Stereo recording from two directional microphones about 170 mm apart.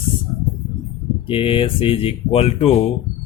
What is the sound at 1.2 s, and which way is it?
Speech, 30° left (ahead or behind).